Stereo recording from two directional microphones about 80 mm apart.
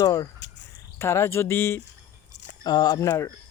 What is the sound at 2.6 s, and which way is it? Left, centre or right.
Speech, left.